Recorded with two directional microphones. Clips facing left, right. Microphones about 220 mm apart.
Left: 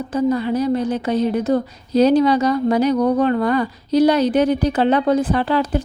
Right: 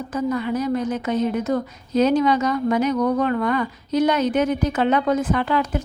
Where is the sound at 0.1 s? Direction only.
30° left (ahead or behind).